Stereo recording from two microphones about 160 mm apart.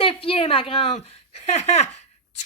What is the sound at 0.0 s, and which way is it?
A woman's voice, 35° left (ahead or behind).